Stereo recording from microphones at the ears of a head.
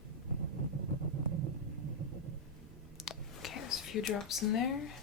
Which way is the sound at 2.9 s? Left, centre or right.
Left.